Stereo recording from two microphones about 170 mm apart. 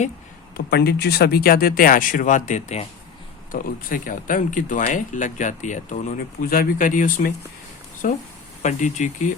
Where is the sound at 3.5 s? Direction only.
55° left (ahead or behind).